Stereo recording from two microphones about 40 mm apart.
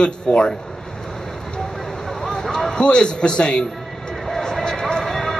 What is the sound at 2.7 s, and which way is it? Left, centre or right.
Speech, left.